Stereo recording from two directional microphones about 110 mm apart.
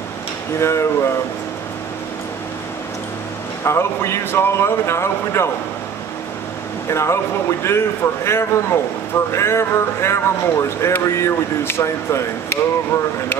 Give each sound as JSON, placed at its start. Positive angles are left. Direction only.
{"t": 0.6, "sound": "a man's voice", "side_deg": 25}
{"t": 3.6, "sound": "a man's voice", "side_deg": 25}
{"t": 6.9, "sound": "a man's voice", "side_deg": 25}